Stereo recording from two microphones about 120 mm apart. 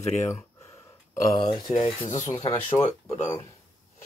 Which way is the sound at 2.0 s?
90° left.